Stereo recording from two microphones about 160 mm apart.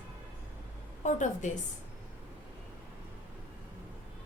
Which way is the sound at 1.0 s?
50° left (ahead or behind).